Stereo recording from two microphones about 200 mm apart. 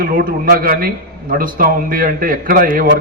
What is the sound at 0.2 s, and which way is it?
A man's voice, 45° right (ahead or behind).